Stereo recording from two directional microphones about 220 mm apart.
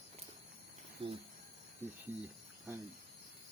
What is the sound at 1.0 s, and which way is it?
Speech, 25° right (ahead or behind).